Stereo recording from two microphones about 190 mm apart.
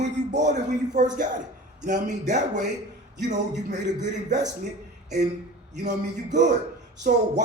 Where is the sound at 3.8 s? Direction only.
40° right (ahead or behind).